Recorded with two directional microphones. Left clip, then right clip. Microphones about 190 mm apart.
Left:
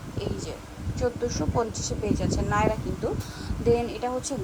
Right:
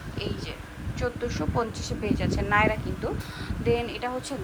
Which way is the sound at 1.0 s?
20° left (ahead or behind).